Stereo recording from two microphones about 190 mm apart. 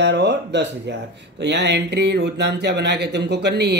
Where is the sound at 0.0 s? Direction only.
65° right (ahead or behind).